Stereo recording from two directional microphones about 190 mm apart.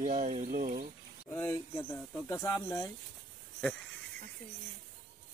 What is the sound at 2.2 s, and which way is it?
Speech, 10° left (ahead or behind).